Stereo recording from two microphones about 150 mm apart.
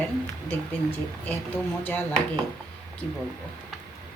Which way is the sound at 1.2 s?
10° left (ahead or behind).